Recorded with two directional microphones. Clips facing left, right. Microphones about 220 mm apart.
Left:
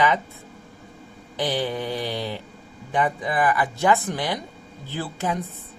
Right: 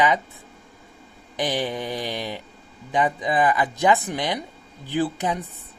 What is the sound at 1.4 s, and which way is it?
Speech, 15° right (ahead or behind).